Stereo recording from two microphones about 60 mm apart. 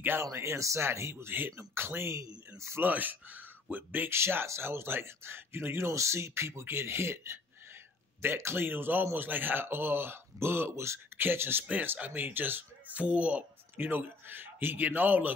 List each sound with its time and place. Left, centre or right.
0.2 s speech: right
2.1 s speech: right
2.8 s speech: right
4.1 s speech: right